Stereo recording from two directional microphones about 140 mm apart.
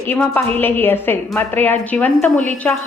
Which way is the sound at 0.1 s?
15° left (ahead or behind).